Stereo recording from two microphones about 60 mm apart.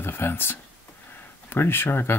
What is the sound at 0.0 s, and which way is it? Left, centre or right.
Speech, left.